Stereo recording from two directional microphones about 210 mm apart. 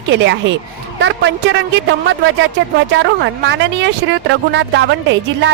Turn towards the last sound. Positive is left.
turn(degrees=-60)  # may be behind; listen again after turning